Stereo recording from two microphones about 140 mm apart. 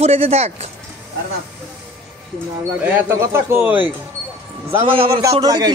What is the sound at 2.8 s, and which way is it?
Speech, 15° right (ahead or behind).